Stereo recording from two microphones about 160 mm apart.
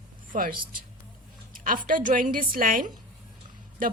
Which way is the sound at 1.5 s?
60° right (ahead or behind).